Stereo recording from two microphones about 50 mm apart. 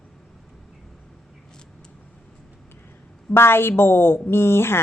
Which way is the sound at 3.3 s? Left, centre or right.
Left.